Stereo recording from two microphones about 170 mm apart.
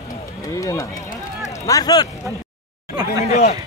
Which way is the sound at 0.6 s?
20° left (ahead or behind).